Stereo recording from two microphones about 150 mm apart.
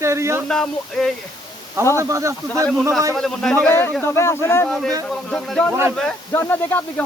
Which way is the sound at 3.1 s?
Centre (ahead or behind).